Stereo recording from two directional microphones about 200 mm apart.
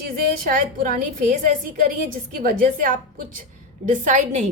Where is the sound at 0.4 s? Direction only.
40° right (ahead or behind).